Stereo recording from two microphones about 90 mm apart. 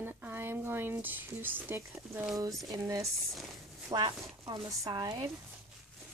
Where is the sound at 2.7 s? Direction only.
40° right (ahead or behind).